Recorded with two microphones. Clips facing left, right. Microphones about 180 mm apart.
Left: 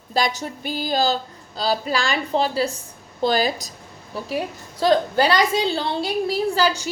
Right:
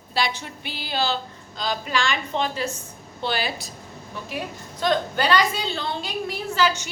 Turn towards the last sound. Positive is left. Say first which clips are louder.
# left 3 dB
turn(degrees=35)  # may be behind; listen again after turning